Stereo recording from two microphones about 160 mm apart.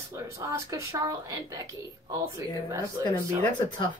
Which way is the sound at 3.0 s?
20° right (ahead or behind).